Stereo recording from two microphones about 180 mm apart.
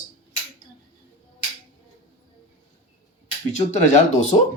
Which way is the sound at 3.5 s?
40° left (ahead or behind).